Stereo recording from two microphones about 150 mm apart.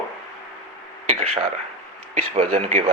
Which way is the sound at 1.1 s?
45° right (ahead or behind).